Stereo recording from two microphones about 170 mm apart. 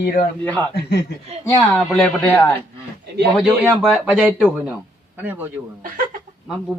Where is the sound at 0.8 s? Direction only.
80° left.